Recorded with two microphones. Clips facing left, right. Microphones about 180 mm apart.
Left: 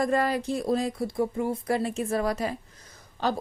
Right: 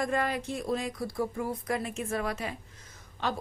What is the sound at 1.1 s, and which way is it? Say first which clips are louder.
Speech: left 5 dB; 25° left (ahead or behind).